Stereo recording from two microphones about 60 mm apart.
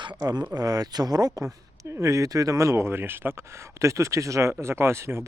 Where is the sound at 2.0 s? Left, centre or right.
Right.